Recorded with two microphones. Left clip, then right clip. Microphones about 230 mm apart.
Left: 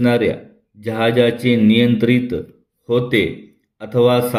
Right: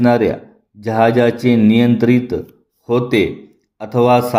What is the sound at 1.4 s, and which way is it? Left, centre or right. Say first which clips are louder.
Speech: right 1 dB; centre.